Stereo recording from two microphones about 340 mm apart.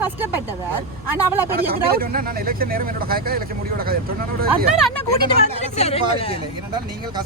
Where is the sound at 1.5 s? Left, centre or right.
Right.